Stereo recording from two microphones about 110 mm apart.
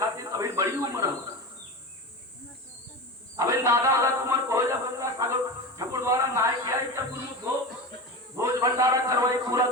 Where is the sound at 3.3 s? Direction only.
30° right (ahead or behind).